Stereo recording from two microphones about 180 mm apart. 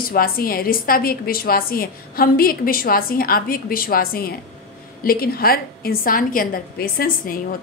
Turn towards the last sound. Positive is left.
turn(degrees=55)  # may be behind; listen again after turning